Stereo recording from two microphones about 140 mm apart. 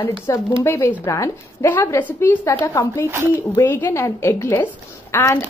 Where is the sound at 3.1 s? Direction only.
15° right (ahead or behind).